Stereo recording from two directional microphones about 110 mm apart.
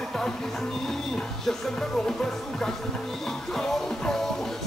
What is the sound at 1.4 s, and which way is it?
Music, 5° left (ahead or behind).